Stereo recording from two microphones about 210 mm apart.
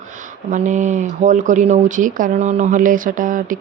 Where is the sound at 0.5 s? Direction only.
35° right (ahead or behind).